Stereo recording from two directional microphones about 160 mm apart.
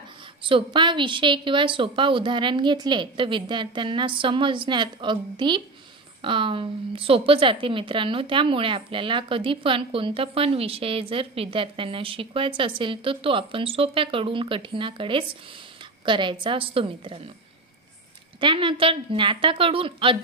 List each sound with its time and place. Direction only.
0.4 s a woman's voice: 35° right (ahead or behind)
18.4 s a woman's voice: 30° right (ahead or behind)